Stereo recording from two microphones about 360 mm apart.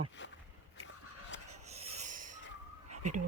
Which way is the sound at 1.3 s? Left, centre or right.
Left.